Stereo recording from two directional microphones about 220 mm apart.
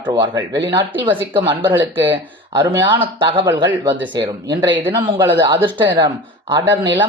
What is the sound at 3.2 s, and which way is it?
Speech, 20° right (ahead or behind).